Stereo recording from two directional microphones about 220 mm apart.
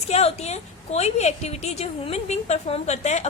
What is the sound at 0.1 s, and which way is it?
A woman's voice, 30° left (ahead or behind).